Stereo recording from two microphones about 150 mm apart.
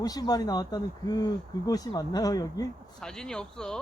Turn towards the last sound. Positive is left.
turn(degrees=5)  # may be behind; listen again after turning